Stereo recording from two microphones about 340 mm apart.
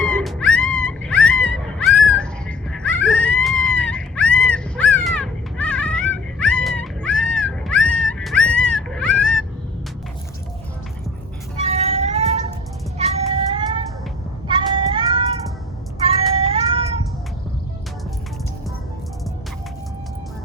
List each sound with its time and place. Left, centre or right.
0.0 s dog: centre
11.5 s cat: centre
13.0 s child singing: centre
14.4 s a sound: centre
16.0 s cat: centre